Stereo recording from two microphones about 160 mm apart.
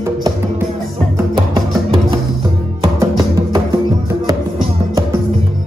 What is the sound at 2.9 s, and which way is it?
Music, 25° right (ahead or behind).